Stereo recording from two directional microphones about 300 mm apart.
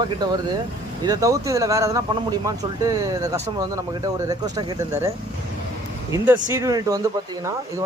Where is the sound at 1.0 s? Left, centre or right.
Centre.